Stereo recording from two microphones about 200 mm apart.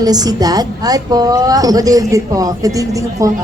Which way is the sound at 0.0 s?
20° right (ahead or behind).